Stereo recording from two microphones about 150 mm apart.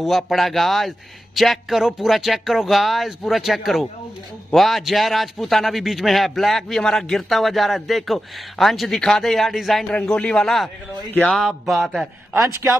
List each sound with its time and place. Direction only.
0.0 s a man's voice: centre (ahead or behind)
12.4 s a man's voice: 20° right (ahead or behind)